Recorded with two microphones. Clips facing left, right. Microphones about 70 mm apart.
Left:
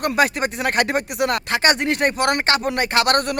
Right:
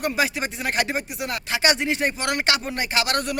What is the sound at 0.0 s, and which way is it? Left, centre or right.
Speech, left.